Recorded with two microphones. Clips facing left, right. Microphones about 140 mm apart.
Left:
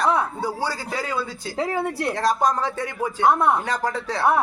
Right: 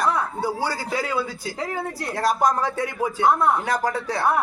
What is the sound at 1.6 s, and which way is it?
Speech, 25° left (ahead or behind).